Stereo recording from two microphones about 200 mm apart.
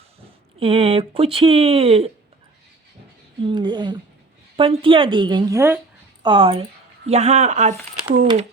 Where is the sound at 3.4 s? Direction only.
20° right (ahead or behind).